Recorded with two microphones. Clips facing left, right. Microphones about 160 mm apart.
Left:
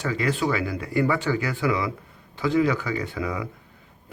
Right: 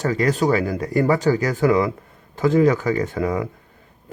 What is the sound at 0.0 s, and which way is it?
Speech, 40° right (ahead or behind).